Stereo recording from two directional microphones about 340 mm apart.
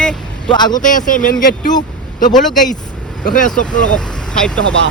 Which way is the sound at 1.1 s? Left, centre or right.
Left.